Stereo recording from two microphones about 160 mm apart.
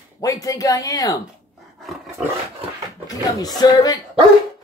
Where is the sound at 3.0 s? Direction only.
25° left (ahead or behind).